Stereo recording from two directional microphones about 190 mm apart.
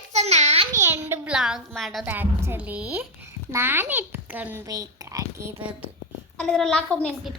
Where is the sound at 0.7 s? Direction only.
15° right (ahead or behind).